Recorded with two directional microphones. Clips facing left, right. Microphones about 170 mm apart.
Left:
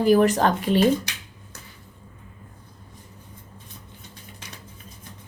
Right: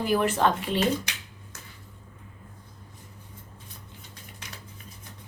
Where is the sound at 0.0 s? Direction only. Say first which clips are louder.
Left 6 dB; 40° left (ahead or behind).